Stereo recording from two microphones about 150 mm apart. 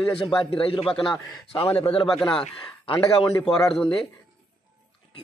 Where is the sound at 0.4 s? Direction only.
35° left (ahead or behind).